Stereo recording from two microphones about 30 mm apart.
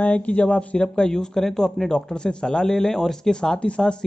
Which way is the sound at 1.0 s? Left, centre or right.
Left.